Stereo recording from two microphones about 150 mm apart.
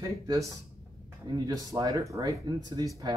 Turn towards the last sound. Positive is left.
turn(degrees=-25)  # may be behind; listen again after turning